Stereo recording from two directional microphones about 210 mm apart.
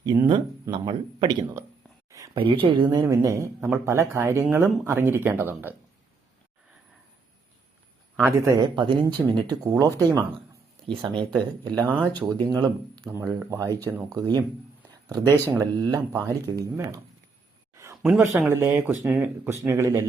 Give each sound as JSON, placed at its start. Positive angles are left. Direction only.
{"t": 0.0, "sound": "speech", "side_deg": -20}
{"t": 8.2, "sound": "speech", "side_deg": -15}
{"t": 11.0, "sound": "speech", "side_deg": -20}
{"t": 12.4, "sound": "speech", "side_deg": -20}
{"t": 17.7, "sound": "a sound", "side_deg": -15}
{"t": 18.1, "sound": "speech", "side_deg": -5}